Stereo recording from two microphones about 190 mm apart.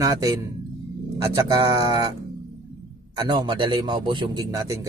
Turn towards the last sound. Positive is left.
turn(degrees=-15)  # may be behind; listen again after turning